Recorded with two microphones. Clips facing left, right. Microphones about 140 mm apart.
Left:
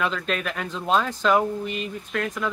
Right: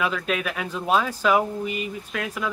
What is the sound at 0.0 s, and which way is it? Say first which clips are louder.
Speech: right 1 dB; 5° right (ahead or behind).